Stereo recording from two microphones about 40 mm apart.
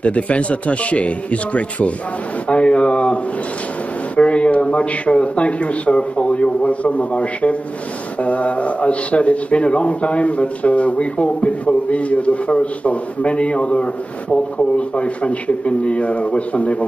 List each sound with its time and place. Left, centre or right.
0.0 s a man's voice: left
4.2 s a man's voice: left